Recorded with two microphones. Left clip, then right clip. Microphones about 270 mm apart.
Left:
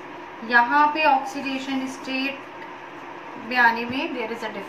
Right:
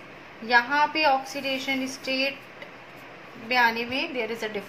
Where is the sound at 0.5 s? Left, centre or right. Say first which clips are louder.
Left 4 dB; right.